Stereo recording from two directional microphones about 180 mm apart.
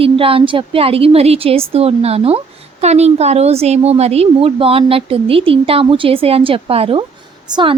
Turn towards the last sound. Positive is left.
turn(degrees=-25)  # may be behind; listen again after turning